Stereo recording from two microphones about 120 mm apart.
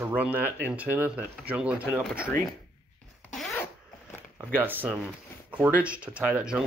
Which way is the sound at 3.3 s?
5° left (ahead or behind).